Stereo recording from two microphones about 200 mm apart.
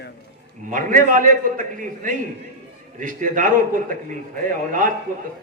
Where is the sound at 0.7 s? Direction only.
40° right (ahead or behind).